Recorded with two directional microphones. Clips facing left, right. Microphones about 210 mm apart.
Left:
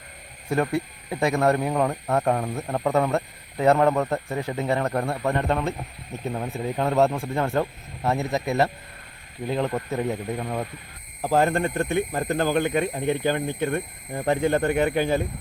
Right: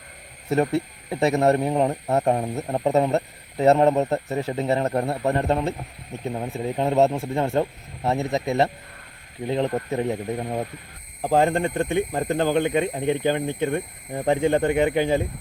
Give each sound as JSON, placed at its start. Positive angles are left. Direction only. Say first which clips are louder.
{"t": 0.5, "sound": "speech", "louder": "right 2 dB", "side_deg": -25}
{"t": 6.2, "sound": "speech", "louder": "right 1 dB", "side_deg": -15}